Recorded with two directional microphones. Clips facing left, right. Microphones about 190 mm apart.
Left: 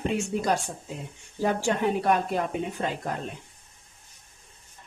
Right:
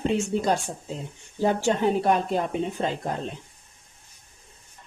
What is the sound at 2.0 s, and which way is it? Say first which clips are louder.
Speech: right 2 dB; 25° right (ahead or behind).